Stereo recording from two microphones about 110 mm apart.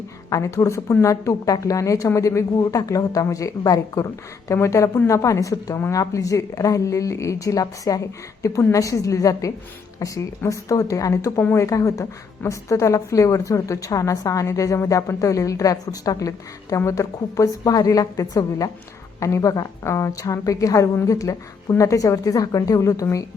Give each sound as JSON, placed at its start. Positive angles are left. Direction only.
{"t": 0.3, "sound": "a woman's voice", "side_deg": 30}